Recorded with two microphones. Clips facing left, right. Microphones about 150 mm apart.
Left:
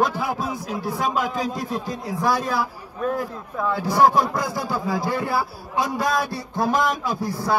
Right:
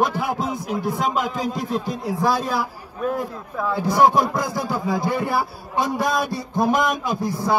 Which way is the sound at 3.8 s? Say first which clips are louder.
Right 1 dB; 20° right (ahead or behind).